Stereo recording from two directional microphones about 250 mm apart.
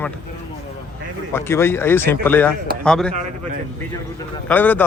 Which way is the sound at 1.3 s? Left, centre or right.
Centre.